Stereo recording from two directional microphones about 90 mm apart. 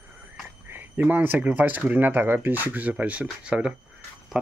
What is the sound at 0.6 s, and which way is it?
Speech, 25° right (ahead or behind).